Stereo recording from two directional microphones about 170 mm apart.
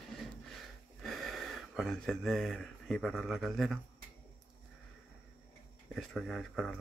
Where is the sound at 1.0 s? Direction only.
Centre (ahead or behind).